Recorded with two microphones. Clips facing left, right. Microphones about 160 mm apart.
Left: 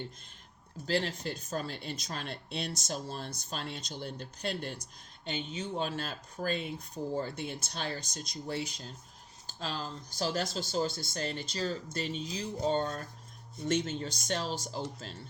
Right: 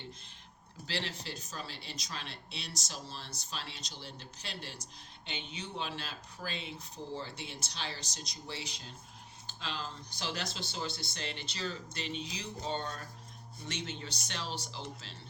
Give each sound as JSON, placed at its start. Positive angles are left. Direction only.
{"t": 0.9, "sound": "speech", "side_deg": 45}